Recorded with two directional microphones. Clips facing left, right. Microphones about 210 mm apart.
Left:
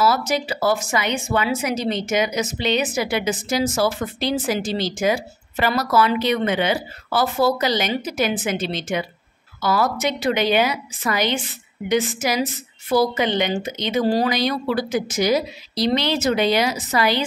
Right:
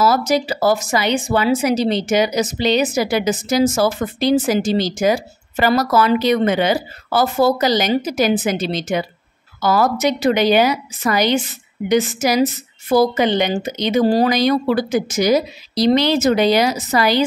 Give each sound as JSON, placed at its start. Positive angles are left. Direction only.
{"t": 0.0, "sound": "speech", "side_deg": -40}